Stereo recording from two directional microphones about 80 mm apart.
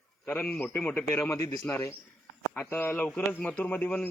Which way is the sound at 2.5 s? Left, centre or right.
Left.